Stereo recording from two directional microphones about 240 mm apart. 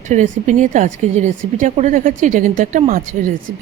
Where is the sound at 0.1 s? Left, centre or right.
Right.